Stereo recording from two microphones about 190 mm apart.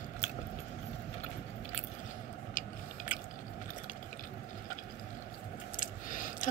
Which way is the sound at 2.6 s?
45° left (ahead or behind).